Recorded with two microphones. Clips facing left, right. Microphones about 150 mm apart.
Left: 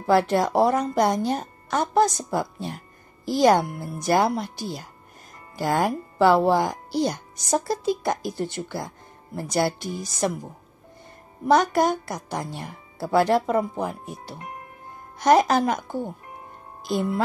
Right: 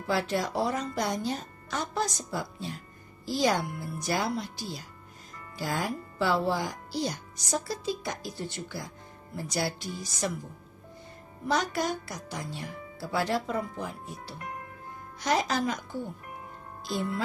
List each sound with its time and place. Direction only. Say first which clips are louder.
0.0 s speech: left 9 dB; 55° left (ahead or behind)
11.4 s speech: left 9 dB; 50° left (ahead or behind)